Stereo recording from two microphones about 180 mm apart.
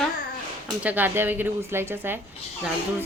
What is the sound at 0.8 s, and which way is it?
A woman's voice, 10° right (ahead or behind).